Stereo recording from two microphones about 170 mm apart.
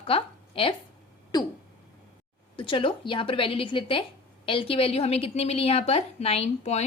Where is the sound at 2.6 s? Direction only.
30° left (ahead or behind).